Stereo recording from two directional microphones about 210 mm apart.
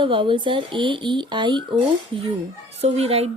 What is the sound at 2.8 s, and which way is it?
Speech, 30° right (ahead or behind).